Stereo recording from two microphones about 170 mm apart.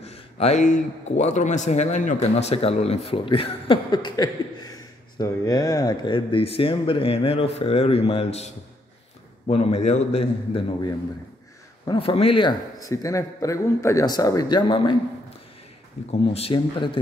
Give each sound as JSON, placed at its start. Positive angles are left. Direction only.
{"t": 0.0, "sound": "speech", "side_deg": 40}
{"t": 9.5, "sound": "speech", "side_deg": 35}
{"t": 11.8, "sound": "speech", "side_deg": 30}
{"t": 12.8, "sound": "speech", "side_deg": 20}
{"t": 16.1, "sound": "speech", "side_deg": 35}